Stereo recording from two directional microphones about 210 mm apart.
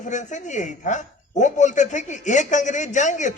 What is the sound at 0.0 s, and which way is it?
A man's voice, 35° left (ahead or behind).